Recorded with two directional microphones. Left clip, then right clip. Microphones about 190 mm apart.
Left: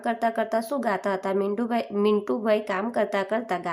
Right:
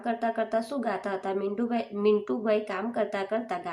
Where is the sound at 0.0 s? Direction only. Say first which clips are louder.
Left 3 dB; 30° left (ahead or behind).